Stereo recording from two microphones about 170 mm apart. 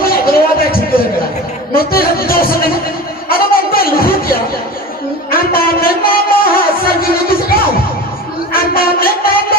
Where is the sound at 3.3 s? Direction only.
60° left (ahead or behind).